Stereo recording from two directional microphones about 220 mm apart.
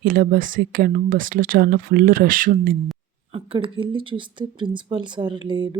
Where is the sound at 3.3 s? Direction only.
25° right (ahead or behind).